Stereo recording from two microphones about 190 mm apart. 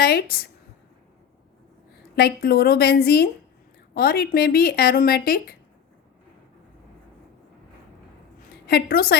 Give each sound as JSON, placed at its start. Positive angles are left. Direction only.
{"t": 0.0, "sound": "a woman's voice", "side_deg": 55}
{"t": 2.1, "sound": "a woman's voice", "side_deg": 55}
{"t": 8.6, "sound": "speech", "side_deg": 55}